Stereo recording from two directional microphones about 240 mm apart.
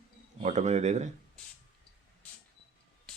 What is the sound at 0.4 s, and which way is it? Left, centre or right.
Speech, right.